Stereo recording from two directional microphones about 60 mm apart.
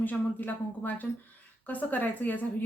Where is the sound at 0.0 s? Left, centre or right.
Left.